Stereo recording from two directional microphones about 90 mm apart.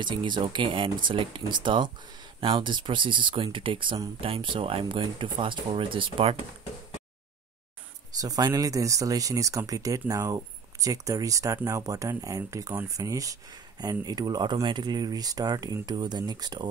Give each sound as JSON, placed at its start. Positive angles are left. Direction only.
{"t": 0.0, "sound": "speech", "side_deg": -60}
{"t": 8.2, "sound": "speech", "side_deg": -45}